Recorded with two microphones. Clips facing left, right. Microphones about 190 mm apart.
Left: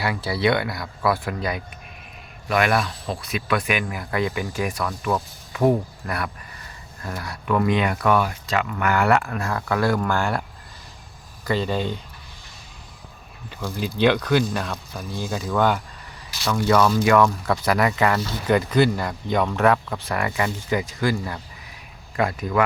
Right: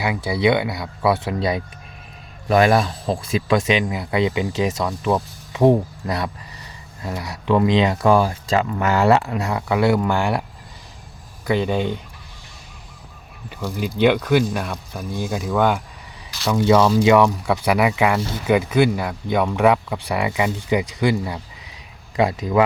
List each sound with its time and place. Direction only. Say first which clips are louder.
0.0 s speech: right 3 dB; 15° right (ahead or behind)
11.4 s speech: right 3 dB; 15° right (ahead or behind)
13.5 s speech: right 2 dB; 10° right (ahead or behind)
16.5 s speech: right 3 dB; 20° right (ahead or behind)